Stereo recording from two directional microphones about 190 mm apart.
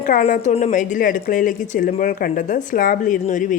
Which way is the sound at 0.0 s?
45° left (ahead or behind).